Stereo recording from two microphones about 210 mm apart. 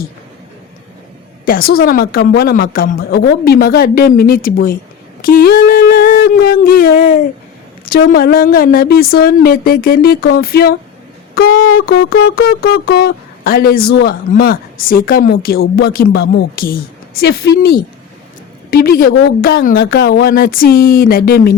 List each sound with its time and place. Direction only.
1.5 s speech: 45° left (ahead or behind)
5.2 s a sound: 45° left (ahead or behind)
7.9 s speech: 45° left (ahead or behind)